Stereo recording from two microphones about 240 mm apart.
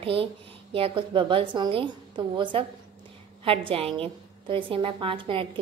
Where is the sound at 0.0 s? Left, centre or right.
Right.